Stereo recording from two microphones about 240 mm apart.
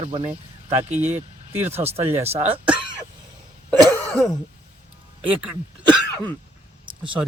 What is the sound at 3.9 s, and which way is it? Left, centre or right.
Cough, centre.